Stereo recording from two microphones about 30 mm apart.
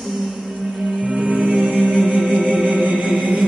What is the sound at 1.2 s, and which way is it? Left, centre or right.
Music, right.